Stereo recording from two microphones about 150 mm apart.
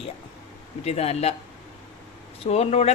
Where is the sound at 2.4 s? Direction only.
45° left (ahead or behind).